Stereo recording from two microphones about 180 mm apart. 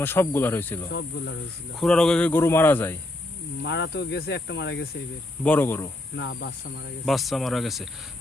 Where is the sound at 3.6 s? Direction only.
75° left (ahead or behind).